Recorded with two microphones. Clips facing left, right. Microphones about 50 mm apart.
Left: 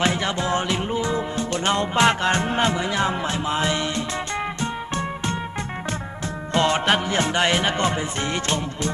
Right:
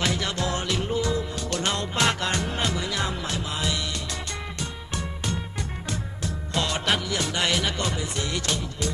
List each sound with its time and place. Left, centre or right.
0.0 s music: left
6.5 s music: left